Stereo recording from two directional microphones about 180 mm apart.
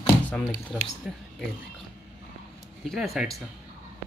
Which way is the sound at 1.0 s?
5° right (ahead or behind).